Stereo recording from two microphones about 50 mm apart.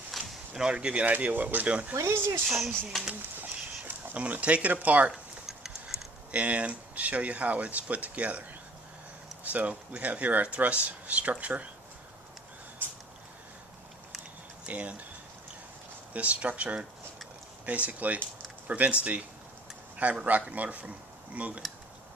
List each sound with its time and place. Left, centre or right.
0.1 s a sound: centre
0.5 s speech: centre
1.0 s speech: right
2.0 s speech: right
2.9 s speech: centre
3.8 s speech: right
5.1 s a sound: centre
6.3 s speech: right
12.8 s a sound: right
14.7 s speech: right
16.1 s speech: right